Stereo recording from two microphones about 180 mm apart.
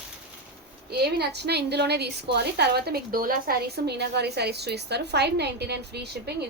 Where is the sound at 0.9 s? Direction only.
65° right (ahead or behind).